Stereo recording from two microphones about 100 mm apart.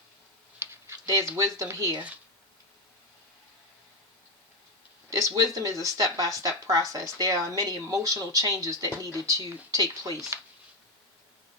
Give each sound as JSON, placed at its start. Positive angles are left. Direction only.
{"t": 0.6, "sound": "a sound", "side_deg": -25}
{"t": 1.0, "sound": "speech", "side_deg": -35}
{"t": 5.3, "sound": "speech", "side_deg": -35}